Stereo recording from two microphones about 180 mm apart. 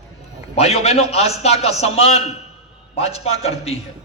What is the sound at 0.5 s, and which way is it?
A man's voice, 35° left (ahead or behind).